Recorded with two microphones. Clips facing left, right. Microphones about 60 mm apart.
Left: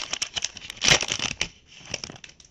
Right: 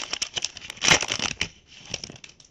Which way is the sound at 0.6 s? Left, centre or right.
Centre.